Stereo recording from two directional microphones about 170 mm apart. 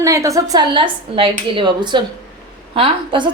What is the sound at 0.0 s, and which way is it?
A woman's voice, 20° right (ahead or behind).